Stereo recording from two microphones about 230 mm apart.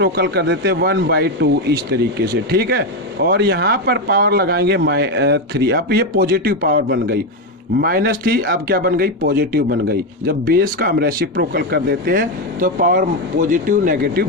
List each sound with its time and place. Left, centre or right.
0.0 s speech: right